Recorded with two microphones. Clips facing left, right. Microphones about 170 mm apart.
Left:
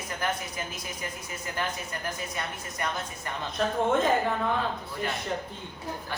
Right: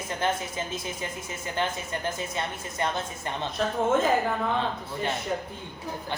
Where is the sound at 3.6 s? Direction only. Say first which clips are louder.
Left 1 dB; centre (ahead or behind).